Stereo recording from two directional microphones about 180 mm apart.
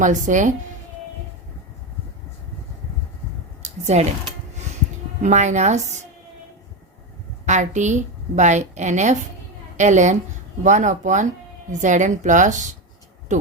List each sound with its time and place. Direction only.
0.0 s a woman's voice: 45° right (ahead or behind)
3.6 s a sound: 40° right (ahead or behind)
5.2 s a woman's voice: 40° right (ahead or behind)
7.4 s a woman's voice: 40° right (ahead or behind)